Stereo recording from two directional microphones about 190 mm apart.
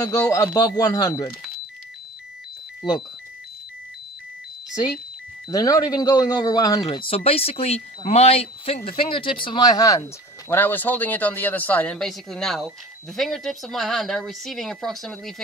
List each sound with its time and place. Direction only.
0.0 s speech: 15° left (ahead or behind)
5.5 s speech: 20° left (ahead or behind); by 15.4 s centre (ahead or behind)